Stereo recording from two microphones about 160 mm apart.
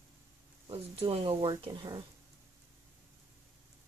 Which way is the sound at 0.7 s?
35° right (ahead or behind).